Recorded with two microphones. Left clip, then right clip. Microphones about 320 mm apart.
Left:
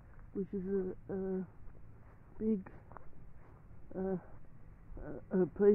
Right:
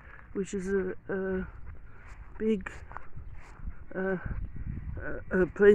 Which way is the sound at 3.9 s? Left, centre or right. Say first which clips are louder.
Right 7 dB; right.